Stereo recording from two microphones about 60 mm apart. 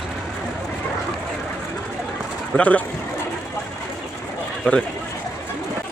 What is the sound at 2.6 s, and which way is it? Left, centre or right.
Speech, left.